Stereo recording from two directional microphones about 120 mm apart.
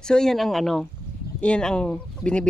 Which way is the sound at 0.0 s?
5° left (ahead or behind).